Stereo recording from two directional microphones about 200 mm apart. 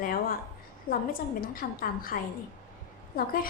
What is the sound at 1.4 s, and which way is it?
Speech, 45° left (ahead or behind).